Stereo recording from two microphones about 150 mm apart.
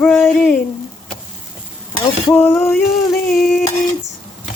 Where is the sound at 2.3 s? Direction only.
15° left (ahead or behind).